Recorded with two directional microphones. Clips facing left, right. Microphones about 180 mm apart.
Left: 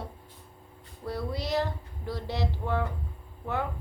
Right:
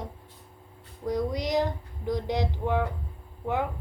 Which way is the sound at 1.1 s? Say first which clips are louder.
Right 4 dB; 15° right (ahead or behind).